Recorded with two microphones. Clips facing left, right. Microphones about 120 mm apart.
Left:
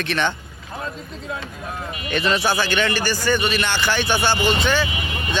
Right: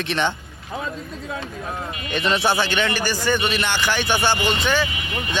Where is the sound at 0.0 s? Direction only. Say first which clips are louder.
Even; 20° right (ahead or behind).